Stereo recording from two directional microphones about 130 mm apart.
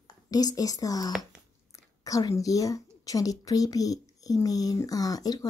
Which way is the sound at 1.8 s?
25° left (ahead or behind).